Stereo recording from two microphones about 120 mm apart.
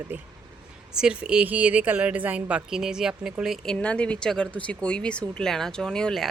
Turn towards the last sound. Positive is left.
turn(degrees=5)  # may be behind; listen again after turning